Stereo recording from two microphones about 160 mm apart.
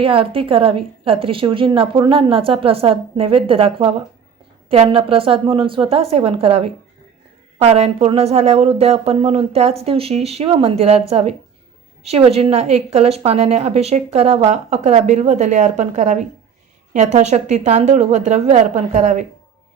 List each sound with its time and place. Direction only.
0.0 s a woman's voice: 35° right (ahead or behind)